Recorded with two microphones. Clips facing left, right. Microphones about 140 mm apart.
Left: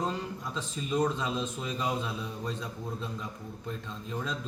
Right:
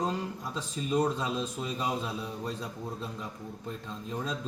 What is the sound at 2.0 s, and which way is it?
A man's voice, 35° right (ahead or behind).